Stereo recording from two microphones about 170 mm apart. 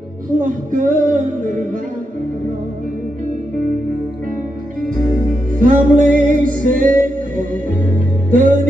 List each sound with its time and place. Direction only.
0.3 s music: 50° right (ahead or behind)
4.9 s music: 50° right (ahead or behind)